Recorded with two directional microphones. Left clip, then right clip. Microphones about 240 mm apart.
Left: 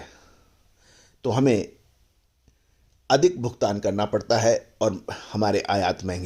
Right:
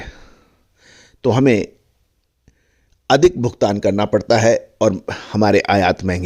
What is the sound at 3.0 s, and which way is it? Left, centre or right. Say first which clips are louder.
Speech: right 7 dB; right.